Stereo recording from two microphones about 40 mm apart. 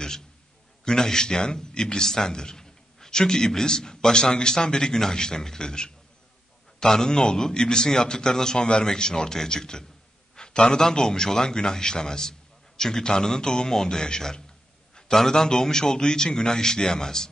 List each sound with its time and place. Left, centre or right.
0.8 s a man's voice: centre